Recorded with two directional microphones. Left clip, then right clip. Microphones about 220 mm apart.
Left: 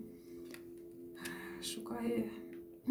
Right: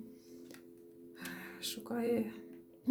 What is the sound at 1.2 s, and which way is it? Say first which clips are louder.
Music: even; 45° right (ahead or behind).